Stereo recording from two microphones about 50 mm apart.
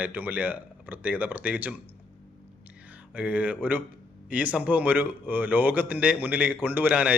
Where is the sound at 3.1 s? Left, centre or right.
Right.